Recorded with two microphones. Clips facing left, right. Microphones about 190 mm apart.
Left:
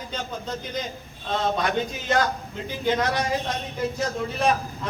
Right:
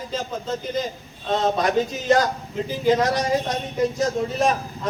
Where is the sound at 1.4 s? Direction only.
35° right (ahead or behind).